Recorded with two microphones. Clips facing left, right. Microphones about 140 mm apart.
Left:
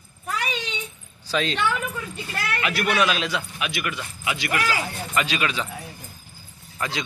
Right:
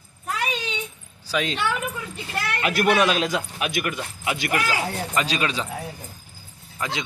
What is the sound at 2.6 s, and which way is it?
Speech, 45° right (ahead or behind).